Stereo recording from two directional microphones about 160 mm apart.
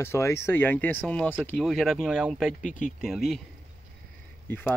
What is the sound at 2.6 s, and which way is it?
Speech, 55° left (ahead or behind).